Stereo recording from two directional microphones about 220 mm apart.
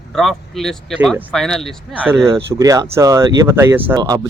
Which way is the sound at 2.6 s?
15° right (ahead or behind).